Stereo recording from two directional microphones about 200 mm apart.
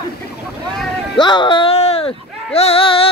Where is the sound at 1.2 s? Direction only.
20° left (ahead or behind).